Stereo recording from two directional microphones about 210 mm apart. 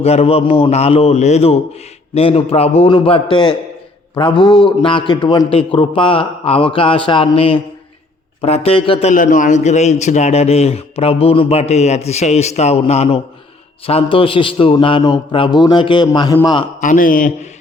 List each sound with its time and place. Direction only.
0.0 s a man's voice: 30° left (ahead or behind)
16.8 s a man's voice: 40° left (ahead or behind)